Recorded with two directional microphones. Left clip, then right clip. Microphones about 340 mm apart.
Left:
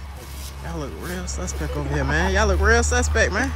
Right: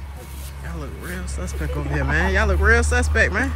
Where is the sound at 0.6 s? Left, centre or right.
Centre.